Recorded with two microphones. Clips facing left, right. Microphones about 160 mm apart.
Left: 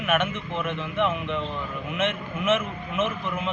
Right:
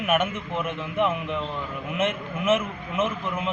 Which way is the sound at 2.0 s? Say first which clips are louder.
Right 1 dB; 45° right (ahead or behind).